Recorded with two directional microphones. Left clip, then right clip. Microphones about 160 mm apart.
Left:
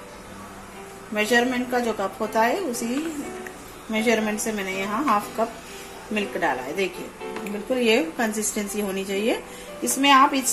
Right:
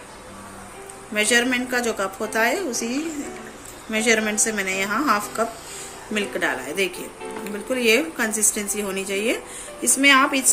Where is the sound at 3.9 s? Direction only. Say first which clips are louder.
Right 2 dB; 20° left (ahead or behind).